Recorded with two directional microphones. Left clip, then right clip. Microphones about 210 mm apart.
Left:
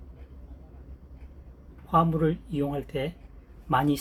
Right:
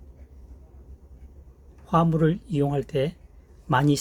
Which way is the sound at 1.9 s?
55° right (ahead or behind).